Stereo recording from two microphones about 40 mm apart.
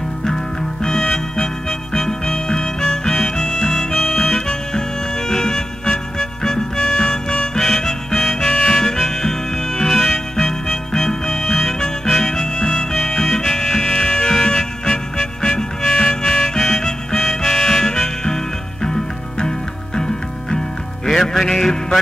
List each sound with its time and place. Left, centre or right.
0.8 s music: centre
2.0 s harmonica: centre
5.3 s music: centre
11.8 s harmonica: centre
12.9 s music: centre
20.0 s music: centre